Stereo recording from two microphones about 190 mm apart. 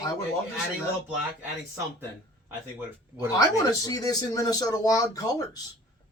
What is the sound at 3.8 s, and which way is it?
A man's voice, 20° left (ahead or behind).